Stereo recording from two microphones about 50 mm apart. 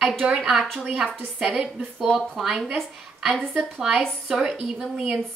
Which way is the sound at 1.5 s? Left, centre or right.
Centre.